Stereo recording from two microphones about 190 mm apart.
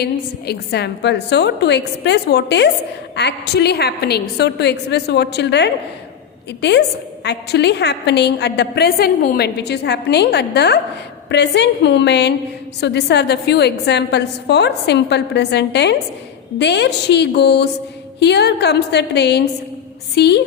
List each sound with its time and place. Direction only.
0.0 s a woman's voice: 60° left (ahead or behind)